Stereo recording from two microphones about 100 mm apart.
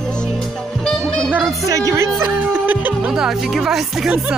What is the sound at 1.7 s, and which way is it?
Music, 35° right (ahead or behind).